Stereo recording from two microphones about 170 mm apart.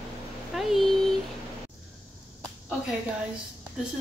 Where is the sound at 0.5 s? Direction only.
Centre (ahead or behind).